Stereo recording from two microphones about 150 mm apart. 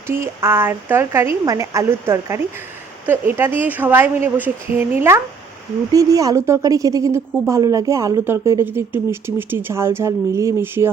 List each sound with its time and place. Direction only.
0.1 s a woman's voice: 15° right (ahead or behind)